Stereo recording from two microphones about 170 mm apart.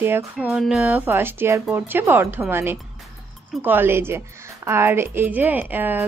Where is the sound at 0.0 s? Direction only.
10° right (ahead or behind).